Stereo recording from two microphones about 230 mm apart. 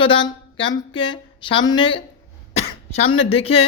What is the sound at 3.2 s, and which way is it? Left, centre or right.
Speech, left.